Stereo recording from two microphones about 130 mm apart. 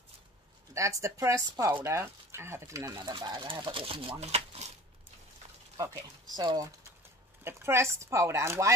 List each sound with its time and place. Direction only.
0.7 s speech: 25° right (ahead or behind); by 4.7 s 55° right (ahead or behind)
5.8 s speech: 30° right (ahead or behind)